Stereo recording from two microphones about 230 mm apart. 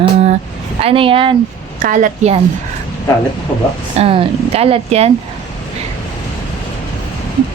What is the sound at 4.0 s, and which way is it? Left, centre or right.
Speech, right.